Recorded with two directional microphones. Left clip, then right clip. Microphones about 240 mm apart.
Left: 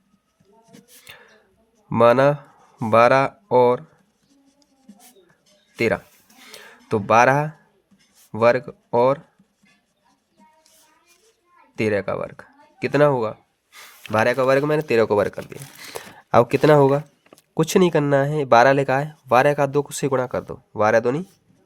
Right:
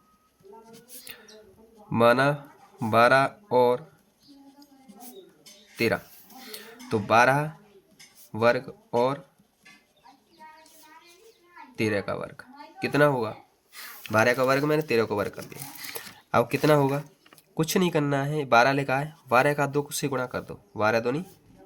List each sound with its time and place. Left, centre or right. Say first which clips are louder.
1.0 s a sound: left 3 dB; left
1.9 s speech: left 6 dB; left
5.7 s speech: left 5 dB; left
6.4 s a sound: left 1 dB; left
8.3 s speech: left 6 dB; left
11.8 s speech: left 6 dB; left